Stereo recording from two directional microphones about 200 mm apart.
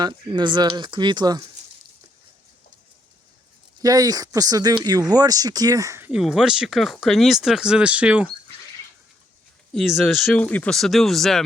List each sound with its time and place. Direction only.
0.0 s speech: 20° right (ahead or behind)
3.8 s speech: 20° right (ahead or behind)
6.1 s speech: centre (ahead or behind)
9.7 s speech: centre (ahead or behind)